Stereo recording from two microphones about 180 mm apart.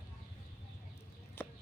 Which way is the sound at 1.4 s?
10° left (ahead or behind).